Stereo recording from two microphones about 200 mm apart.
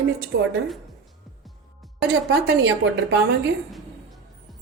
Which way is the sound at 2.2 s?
60° right (ahead or behind).